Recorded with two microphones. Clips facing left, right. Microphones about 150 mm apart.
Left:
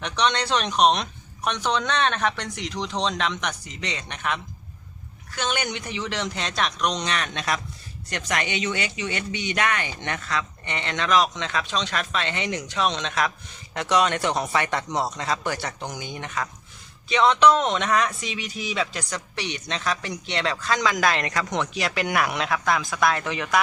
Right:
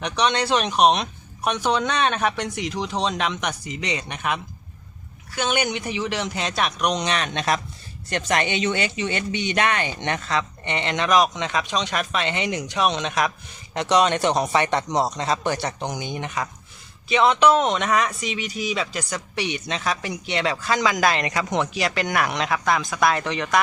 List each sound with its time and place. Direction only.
0.0 s a man's voice: 10° right (ahead or behind)